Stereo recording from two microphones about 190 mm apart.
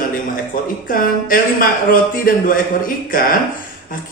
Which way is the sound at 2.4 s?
45° left (ahead or behind).